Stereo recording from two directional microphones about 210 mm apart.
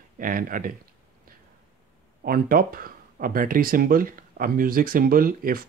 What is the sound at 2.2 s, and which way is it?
Speech, 45° right (ahead or behind).